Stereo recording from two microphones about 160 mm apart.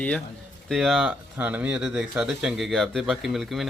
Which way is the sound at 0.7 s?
Centre (ahead or behind).